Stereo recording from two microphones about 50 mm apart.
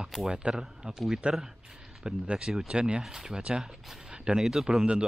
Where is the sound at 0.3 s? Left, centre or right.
Centre.